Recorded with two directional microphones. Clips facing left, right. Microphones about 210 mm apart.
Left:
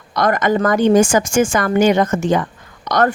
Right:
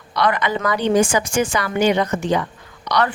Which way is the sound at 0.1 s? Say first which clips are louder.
Left 4 dB; 45° left (ahead or behind).